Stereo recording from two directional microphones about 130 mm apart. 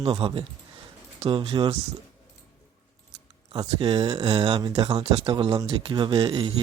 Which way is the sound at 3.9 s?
50° right (ahead or behind).